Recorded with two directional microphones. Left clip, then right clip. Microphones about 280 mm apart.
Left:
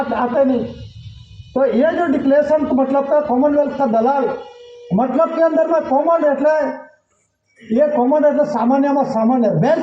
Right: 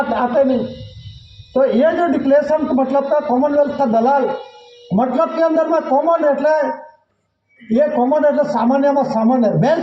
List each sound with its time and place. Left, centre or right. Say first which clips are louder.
0.1 s music: even; right
1.5 s a man's voice: right 1 dB; right
7.7 s a man's voice: even; right